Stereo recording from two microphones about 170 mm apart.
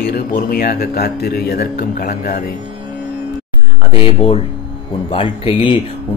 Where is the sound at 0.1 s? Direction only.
60° left (ahead or behind).